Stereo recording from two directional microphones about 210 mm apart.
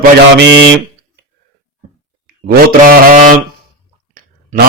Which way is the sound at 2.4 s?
45° right (ahead or behind).